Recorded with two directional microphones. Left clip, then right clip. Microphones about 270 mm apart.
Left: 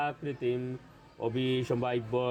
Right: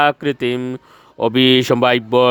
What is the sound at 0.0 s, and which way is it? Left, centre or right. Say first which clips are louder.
Speech: right 17 dB; right.